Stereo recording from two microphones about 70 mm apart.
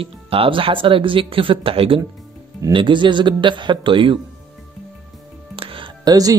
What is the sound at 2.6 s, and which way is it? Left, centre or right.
Speech, right.